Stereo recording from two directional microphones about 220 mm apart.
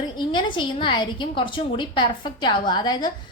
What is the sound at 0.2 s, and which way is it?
A woman's voice, 20° left (ahead or behind).